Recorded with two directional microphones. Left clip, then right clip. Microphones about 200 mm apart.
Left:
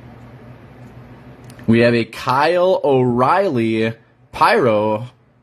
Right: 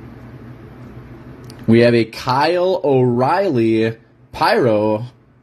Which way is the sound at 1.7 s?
15° left (ahead or behind).